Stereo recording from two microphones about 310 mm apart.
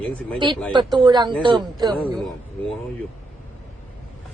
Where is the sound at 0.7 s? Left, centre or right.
Centre.